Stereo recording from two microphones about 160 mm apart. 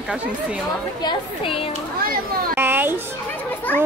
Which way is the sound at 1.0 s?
35° left (ahead or behind).